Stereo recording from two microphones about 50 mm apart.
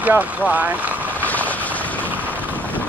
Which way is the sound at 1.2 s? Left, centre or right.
Left.